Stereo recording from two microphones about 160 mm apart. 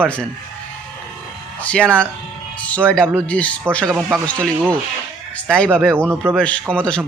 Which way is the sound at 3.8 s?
10° right (ahead or behind).